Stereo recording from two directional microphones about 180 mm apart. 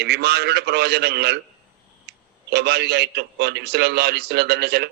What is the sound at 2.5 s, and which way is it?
A man's voice, 65° right (ahead or behind).